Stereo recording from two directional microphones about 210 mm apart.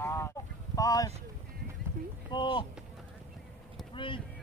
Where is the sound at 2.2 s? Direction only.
20° left (ahead or behind).